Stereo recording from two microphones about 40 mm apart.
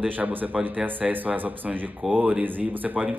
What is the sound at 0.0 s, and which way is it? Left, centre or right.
A man's voice, right.